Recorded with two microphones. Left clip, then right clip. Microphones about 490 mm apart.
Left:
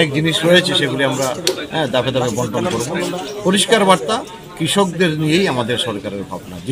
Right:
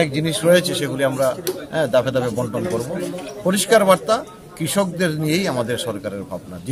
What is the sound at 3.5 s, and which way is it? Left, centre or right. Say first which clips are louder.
A man's voice: left 2 dB; right.